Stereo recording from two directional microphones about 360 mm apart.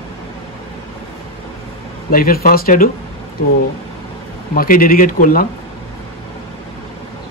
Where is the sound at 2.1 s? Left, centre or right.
Left.